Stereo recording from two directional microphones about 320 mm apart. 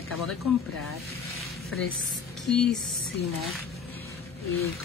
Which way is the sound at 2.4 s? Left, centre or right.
Centre.